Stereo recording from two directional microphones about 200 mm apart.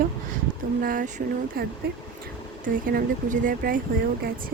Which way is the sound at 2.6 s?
40° right (ahead or behind).